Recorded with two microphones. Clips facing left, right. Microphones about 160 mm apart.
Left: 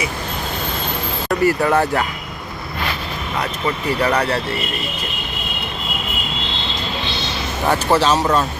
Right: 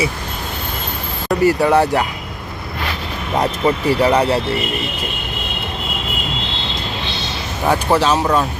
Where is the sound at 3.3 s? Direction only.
30° right (ahead or behind).